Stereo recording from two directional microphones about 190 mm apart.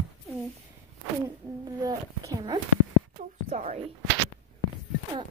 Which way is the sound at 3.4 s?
35° right (ahead or behind).